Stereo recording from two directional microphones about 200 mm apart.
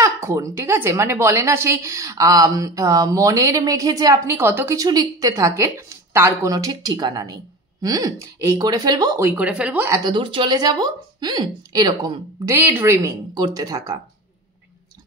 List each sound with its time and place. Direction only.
0.0 s a woman's voice: 15° right (ahead or behind)